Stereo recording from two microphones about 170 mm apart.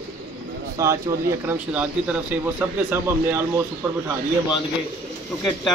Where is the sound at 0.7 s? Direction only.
15° right (ahead or behind).